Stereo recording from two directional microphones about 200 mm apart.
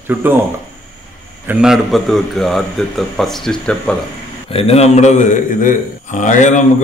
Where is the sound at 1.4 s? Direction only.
Centre (ahead or behind).